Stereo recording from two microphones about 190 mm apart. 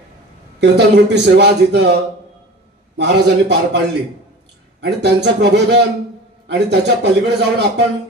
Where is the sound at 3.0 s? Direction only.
65° right (ahead or behind).